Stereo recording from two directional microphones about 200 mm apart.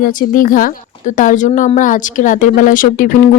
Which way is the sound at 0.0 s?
45° left (ahead or behind).